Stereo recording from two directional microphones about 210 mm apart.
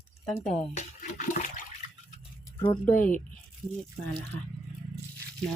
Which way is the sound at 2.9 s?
40° left (ahead or behind).